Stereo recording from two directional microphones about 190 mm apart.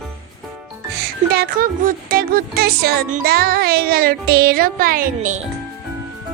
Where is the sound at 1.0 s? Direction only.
55° right (ahead or behind).